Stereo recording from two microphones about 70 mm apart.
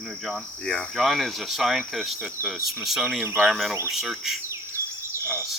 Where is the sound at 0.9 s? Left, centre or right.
Centre.